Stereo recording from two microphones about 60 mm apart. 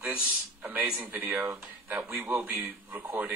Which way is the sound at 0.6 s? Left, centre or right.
Right.